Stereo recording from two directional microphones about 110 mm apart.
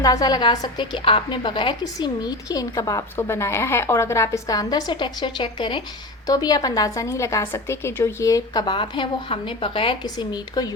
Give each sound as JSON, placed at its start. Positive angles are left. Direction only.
{"t": 0.0, "sound": "a woman's voice", "side_deg": 35}
{"t": 6.2, "sound": "a woman's voice", "side_deg": 35}